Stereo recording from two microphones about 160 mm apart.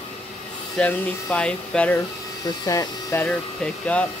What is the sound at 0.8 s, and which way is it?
Speech, 5° left (ahead or behind).